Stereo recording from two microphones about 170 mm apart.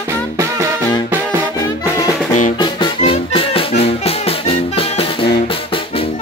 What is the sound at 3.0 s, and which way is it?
Music, 35° left (ahead or behind).